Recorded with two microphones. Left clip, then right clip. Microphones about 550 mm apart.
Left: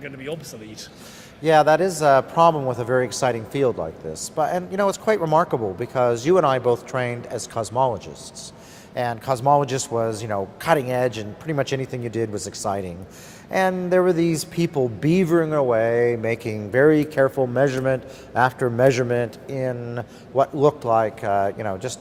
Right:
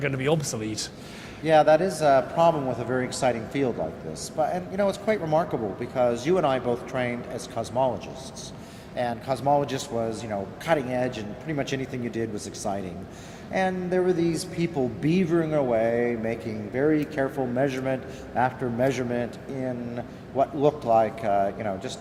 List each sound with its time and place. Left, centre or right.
0.0 s speech: right
1.5 s a woman's voice: left